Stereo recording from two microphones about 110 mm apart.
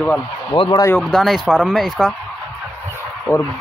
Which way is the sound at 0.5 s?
40° left (ahead or behind).